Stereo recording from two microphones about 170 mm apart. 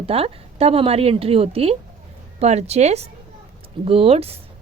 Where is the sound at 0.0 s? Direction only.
35° right (ahead or behind).